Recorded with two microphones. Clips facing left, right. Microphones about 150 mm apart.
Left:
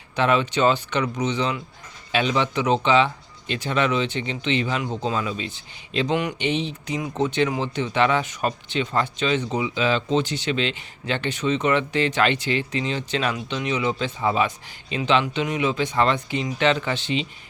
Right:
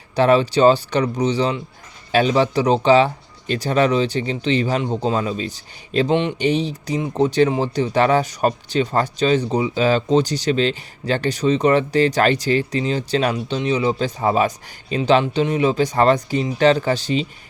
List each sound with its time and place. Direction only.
0.2 s speech: 35° right (ahead or behind)